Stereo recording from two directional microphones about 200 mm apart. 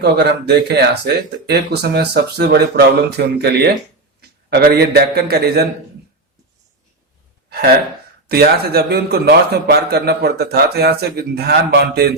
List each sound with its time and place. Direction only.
0.0 s a man's voice: 55° right (ahead or behind)
8.3 s a man's voice: 50° right (ahead or behind)